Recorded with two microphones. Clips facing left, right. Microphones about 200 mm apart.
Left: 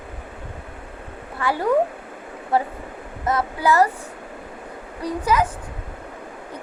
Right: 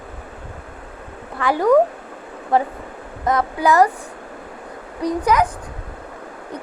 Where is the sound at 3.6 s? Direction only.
15° right (ahead or behind).